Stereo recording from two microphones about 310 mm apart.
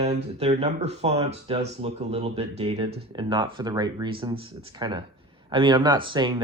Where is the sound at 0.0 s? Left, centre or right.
Centre.